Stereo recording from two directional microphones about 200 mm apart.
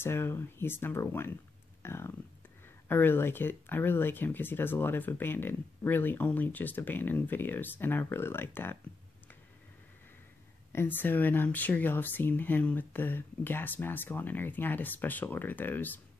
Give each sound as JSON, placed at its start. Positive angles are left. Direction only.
{"t": 0.0, "sound": "speech", "side_deg": 10}
{"t": 10.7, "sound": "speech", "side_deg": 10}